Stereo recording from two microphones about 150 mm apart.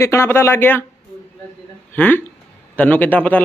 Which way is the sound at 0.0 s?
20° left (ahead or behind).